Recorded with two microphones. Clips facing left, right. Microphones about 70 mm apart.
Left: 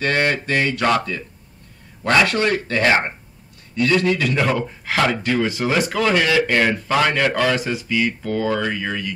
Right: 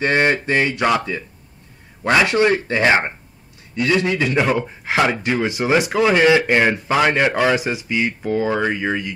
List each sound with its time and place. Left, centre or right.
0.0 s speech: right